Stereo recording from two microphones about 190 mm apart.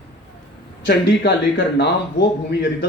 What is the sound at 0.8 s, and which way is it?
Speech, 60° left (ahead or behind).